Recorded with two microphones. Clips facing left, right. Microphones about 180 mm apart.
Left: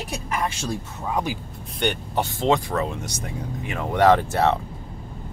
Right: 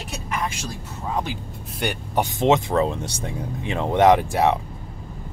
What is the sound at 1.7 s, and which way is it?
Speech, 10° right (ahead or behind).